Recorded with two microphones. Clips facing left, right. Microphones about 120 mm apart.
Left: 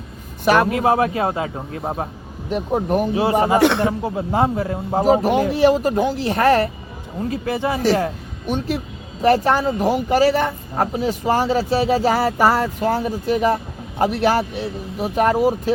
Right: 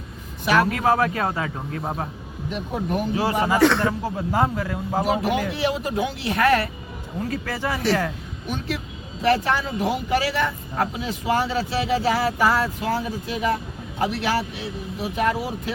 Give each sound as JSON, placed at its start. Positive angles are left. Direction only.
{"t": 0.4, "sound": "speech", "side_deg": 45}
{"t": 0.7, "sound": "a man's voice", "side_deg": 25}
{"t": 2.5, "sound": "speech", "side_deg": 45}
{"t": 3.3, "sound": "speech", "side_deg": 30}
{"t": 3.6, "sound": "a man's voice", "side_deg": 20}
{"t": 5.0, "sound": "speech", "side_deg": 40}
{"t": 7.2, "sound": "a man's voice", "side_deg": 20}